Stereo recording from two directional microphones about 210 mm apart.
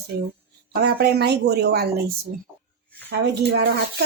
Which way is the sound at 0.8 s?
50° right (ahead or behind).